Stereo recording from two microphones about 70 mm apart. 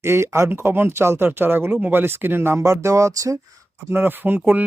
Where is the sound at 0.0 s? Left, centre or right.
Right.